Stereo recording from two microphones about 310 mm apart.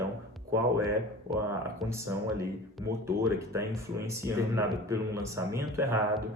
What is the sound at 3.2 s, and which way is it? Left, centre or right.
Speech, centre.